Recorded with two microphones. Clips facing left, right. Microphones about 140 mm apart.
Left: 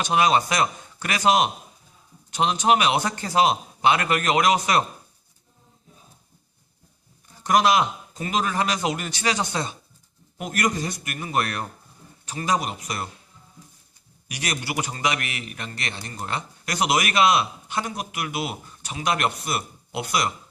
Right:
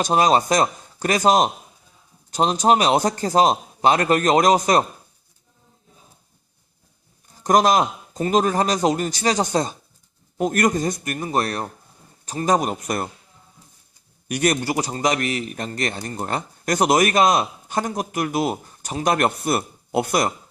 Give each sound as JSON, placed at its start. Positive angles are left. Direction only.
{"t": 0.0, "sound": "a man's voice", "side_deg": -40}
{"t": 7.4, "sound": "a man's voice", "side_deg": -40}
{"t": 14.3, "sound": "a man's voice", "side_deg": -50}